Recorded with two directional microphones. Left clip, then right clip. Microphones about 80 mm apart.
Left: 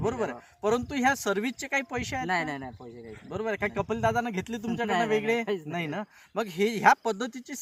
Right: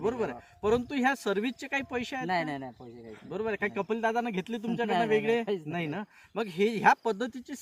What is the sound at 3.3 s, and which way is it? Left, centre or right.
A man's voice, left.